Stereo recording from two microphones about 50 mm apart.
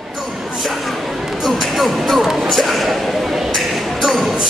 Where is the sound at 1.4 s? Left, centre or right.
Centre.